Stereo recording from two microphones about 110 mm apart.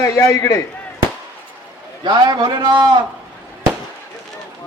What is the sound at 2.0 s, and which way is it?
Speech, 40° right (ahead or behind).